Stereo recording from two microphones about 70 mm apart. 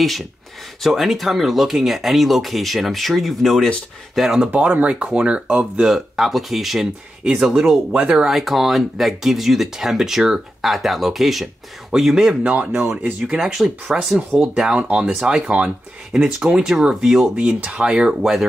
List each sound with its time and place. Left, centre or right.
0.0 s speech: centre
4.5 s speech: right; by 7.8 s centre
7.9 s speech: centre
8.2 s speech: centre
12.4 s speech: right
13.3 s speech: centre
14.4 s speech: centre
15.1 s speech: centre